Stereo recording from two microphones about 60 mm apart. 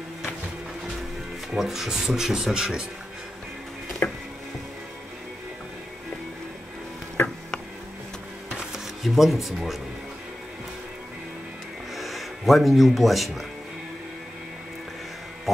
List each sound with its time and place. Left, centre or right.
1.5 s speech: centre
4.0 s a sound: left
8.5 s shuffling cards: centre
11.9 s speech: centre